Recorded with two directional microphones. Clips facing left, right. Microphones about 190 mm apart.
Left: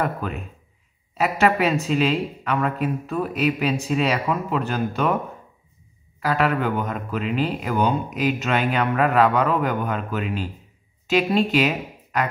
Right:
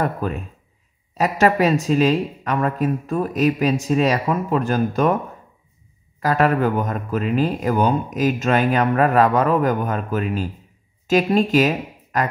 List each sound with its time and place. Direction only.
0.0 s speech: 40° right (ahead or behind)
6.2 s speech: 45° right (ahead or behind)